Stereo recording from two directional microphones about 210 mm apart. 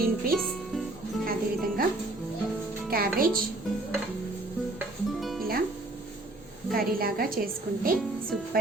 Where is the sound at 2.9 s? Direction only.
45° right (ahead or behind).